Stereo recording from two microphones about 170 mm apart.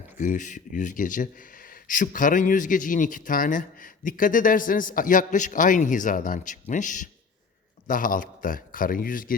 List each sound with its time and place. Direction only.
0.2 s speech: 50° left (ahead or behind)